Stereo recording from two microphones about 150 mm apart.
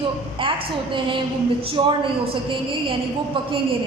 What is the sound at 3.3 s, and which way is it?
Speech, 35° right (ahead or behind).